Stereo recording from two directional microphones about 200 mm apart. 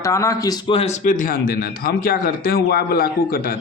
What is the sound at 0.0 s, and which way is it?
Speech, 15° left (ahead or behind).